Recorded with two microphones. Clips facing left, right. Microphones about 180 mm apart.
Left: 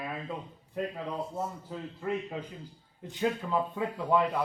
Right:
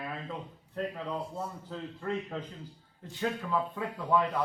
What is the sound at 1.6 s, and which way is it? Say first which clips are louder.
Speech: left 1 dB; 10° left (ahead or behind).